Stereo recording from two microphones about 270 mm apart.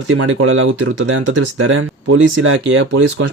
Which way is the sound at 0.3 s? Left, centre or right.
Right.